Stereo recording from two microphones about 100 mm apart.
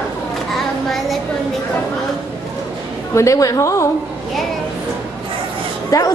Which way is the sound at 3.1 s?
35° left (ahead or behind).